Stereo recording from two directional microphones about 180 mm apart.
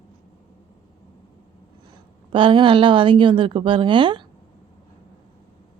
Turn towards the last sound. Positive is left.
turn(degrees=-25)  # may be behind; listen again after turning